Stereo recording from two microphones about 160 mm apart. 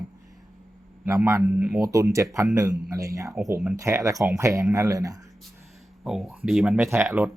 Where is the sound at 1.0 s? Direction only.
20° right (ahead or behind).